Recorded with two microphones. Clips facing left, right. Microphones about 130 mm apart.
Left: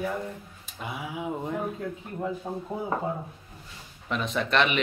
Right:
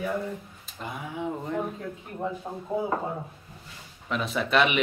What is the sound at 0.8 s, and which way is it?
Speech, 5° left (ahead or behind).